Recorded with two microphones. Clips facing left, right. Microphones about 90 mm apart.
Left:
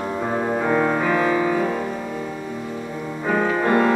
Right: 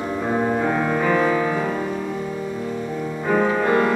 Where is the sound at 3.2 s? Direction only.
10° left (ahead or behind).